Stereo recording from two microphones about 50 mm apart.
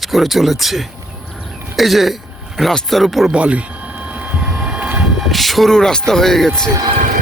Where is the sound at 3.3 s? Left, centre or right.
Right.